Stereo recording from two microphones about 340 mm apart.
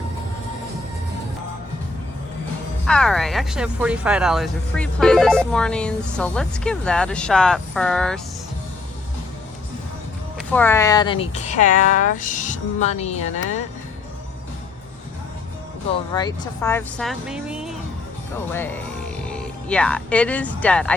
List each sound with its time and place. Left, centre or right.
2.8 s speech: centre
10.3 s speech: centre; by 13.6 s left
16.1 s speech: centre